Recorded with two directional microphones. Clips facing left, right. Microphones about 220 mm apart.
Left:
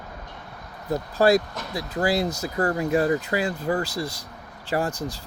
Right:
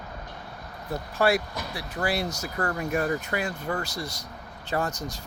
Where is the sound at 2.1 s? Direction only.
75° left (ahead or behind).